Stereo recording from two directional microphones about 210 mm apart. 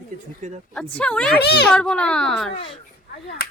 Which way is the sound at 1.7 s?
5° left (ahead or behind).